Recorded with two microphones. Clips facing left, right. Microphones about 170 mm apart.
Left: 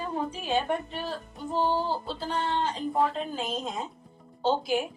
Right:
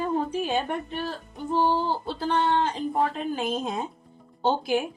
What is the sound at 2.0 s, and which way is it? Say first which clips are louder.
A woman's voice: right 6 dB; 65° right (ahead or behind).